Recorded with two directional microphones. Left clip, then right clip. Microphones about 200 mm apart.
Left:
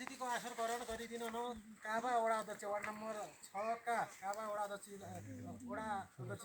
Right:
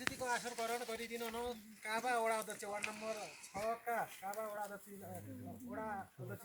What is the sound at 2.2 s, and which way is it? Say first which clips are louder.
Speech: even; 15° left (ahead or behind).